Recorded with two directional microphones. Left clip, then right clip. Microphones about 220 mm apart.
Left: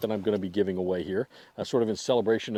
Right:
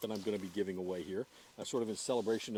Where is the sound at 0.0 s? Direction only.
45° left (ahead or behind).